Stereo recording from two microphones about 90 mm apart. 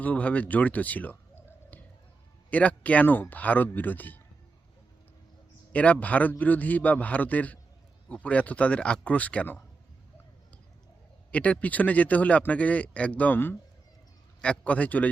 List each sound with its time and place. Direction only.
0.0 s speech: 15° left (ahead or behind)
5.7 s speech: 15° left (ahead or behind)
11.3 s speech: 15° left (ahead or behind)